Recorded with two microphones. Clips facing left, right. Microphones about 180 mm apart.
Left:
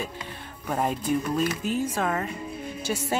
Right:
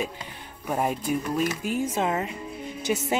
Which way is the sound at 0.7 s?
10° right (ahead or behind).